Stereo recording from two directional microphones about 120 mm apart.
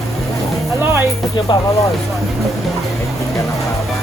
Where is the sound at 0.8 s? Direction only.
20° right (ahead or behind).